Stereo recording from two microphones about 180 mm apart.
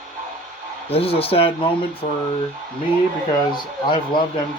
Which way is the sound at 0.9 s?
35° left (ahead or behind).